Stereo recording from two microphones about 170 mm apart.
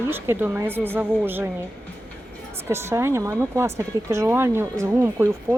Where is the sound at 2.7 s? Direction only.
15° right (ahead or behind).